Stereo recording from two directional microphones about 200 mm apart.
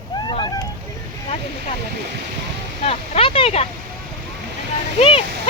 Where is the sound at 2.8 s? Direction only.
30° left (ahead or behind).